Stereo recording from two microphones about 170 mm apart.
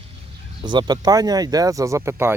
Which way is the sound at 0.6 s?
25° right (ahead or behind).